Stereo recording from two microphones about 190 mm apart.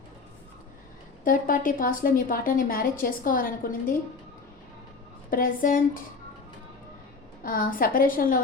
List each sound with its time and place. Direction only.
1.2 s a woman's voice: 45° left (ahead or behind)
5.3 s a woman's voice: 50° left (ahead or behind)
7.4 s a woman's voice: 50° left (ahead or behind)